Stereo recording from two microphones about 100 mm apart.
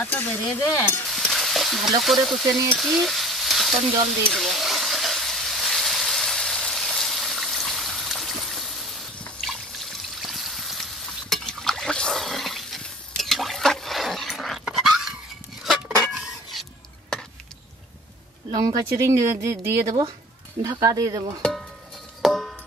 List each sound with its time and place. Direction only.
0.0 s stir: 20° left (ahead or behind)
1.1 s frying: centre (ahead or behind)
2.8 s stir: centre (ahead or behind)
4.3 s a sound: centre (ahead or behind)
9.5 s trickle: centre (ahead or behind)
15.6 s cutlery: centre (ahead or behind)
18.5 s speech: 40° right (ahead or behind)
21.4 s music: 5° left (ahead or behind)